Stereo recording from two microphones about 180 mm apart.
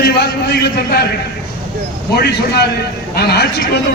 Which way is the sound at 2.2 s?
65° left (ahead or behind).